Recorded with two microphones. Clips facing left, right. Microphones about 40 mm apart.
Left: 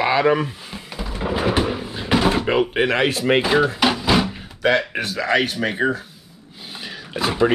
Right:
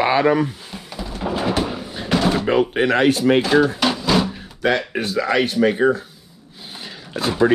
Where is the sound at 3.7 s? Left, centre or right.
Centre.